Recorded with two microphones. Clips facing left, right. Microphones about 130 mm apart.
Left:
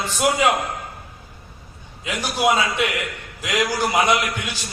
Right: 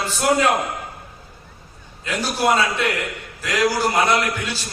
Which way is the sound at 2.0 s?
15° left (ahead or behind).